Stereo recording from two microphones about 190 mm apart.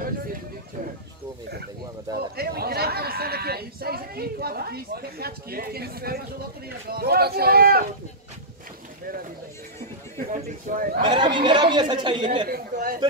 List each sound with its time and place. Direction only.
2.1 s speech: 55° right (ahead or behind)
10.1 s a sound: 45° right (ahead or behind)
11.0 s speech: 25° right (ahead or behind)
12.4 s speech: 50° right (ahead or behind)